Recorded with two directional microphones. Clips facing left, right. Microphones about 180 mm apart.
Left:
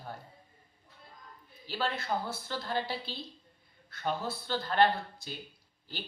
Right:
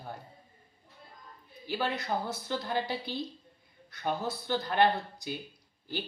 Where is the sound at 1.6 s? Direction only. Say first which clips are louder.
Right 1 dB; 15° right (ahead or behind).